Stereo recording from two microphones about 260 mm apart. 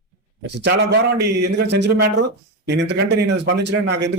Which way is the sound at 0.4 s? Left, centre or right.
Right.